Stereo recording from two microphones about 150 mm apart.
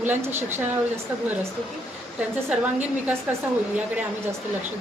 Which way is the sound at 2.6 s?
10° right (ahead or behind).